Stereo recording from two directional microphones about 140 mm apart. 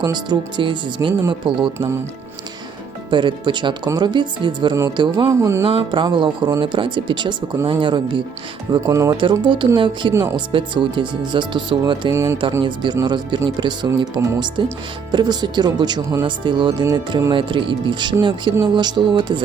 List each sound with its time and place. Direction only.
0.0 s speech: 30° right (ahead or behind)
3.1 s speech: 35° right (ahead or behind)
5.3 s speech: 20° right (ahead or behind)
5.6 s speech: 35° right (ahead or behind)
8.7 s speech: 20° right (ahead or behind)
9.2 s speech: 35° right (ahead or behind)
12.1 s speech: 20° right (ahead or behind)
12.6 s speech: 35° right (ahead or behind)